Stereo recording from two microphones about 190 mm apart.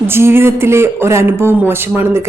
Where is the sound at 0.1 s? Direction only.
10° right (ahead or behind).